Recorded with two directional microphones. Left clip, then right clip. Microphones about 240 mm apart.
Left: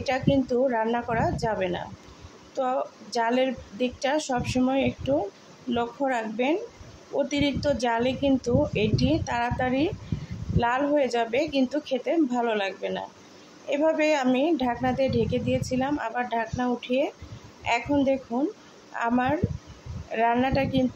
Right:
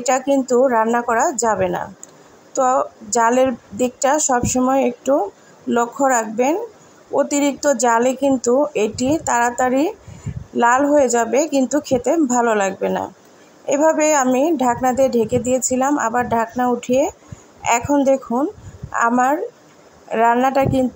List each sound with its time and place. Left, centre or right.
0.0 s a woman's voice: right